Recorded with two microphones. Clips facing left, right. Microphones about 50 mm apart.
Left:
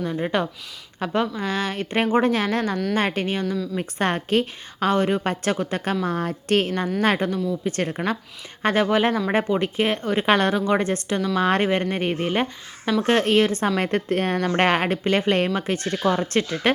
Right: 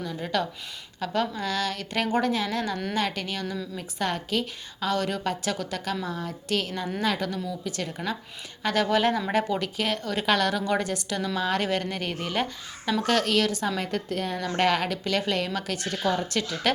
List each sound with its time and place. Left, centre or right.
0.0 s speech: left
7.0 s speech: left
8.6 s speech: left